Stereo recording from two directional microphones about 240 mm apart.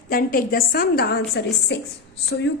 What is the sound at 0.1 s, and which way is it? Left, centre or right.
A woman's voice, left.